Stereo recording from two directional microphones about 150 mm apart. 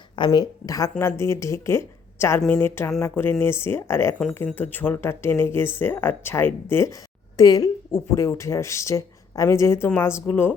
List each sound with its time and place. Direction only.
0.2 s a woman's voice: 25° left (ahead or behind)